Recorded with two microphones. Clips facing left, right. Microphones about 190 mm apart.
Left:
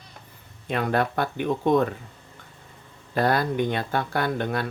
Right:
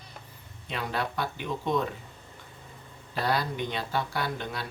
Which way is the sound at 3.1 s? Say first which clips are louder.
Left 6 dB; 50° left (ahead or behind).